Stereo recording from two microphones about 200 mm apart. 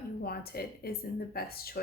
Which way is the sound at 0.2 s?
50° left (ahead or behind).